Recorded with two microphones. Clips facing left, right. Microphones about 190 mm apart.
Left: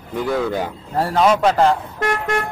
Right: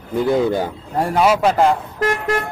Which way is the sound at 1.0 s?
10° right (ahead or behind).